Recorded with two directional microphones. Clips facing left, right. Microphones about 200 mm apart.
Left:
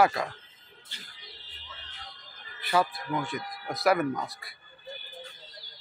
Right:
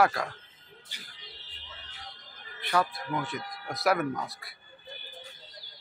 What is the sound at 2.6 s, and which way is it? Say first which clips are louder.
Speech: left 2 dB; centre (ahead or behind).